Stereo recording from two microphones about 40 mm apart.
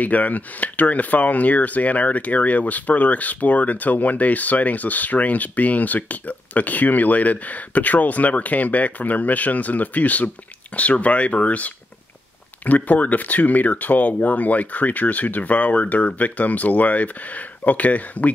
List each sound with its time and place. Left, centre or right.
0.0 s speech: left